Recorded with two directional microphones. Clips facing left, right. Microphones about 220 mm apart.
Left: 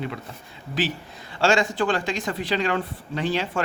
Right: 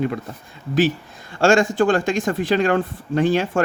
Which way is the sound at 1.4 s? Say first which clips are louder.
Right 6 dB; 50° right (ahead or behind).